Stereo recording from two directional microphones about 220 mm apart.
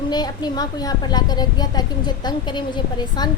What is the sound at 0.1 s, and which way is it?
A woman's voice, 20° left (ahead or behind).